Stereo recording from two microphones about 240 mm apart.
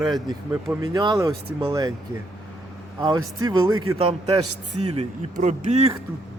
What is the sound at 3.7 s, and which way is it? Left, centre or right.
Speech, right.